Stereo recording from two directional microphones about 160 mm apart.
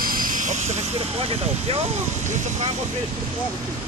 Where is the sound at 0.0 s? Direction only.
60° right (ahead or behind).